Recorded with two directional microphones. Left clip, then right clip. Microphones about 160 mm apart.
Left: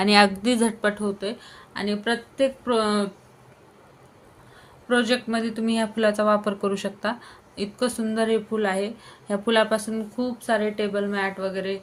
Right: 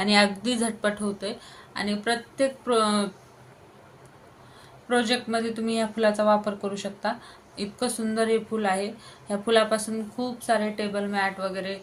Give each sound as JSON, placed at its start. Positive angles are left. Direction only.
{"t": 0.0, "sound": "speech", "side_deg": 55}
{"t": 4.9, "sound": "speech", "side_deg": 40}